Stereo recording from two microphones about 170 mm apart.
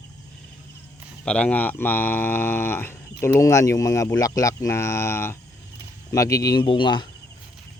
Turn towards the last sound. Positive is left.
turn(degrees=30)  # may be behind; listen again after turning